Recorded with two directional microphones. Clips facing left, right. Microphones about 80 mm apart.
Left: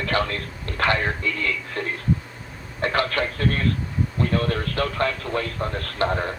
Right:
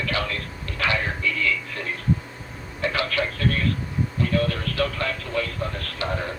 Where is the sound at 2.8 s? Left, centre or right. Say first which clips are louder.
Left 2 dB; left.